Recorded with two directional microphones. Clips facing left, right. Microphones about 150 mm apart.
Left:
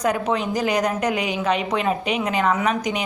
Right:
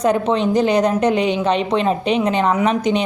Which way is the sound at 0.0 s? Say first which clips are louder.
Right 5 dB; 25° right (ahead or behind).